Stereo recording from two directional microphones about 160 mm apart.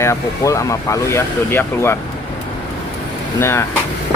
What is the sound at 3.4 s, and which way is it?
Speech, 15° left (ahead or behind).